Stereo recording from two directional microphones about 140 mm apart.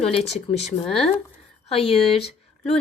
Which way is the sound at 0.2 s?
50° left (ahead or behind).